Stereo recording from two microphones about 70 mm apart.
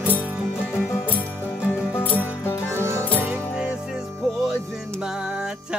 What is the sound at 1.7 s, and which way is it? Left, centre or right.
Music, left.